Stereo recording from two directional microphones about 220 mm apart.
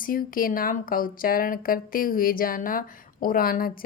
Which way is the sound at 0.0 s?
40° left (ahead or behind).